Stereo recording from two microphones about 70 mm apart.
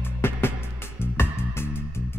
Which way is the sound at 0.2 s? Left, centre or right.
Left.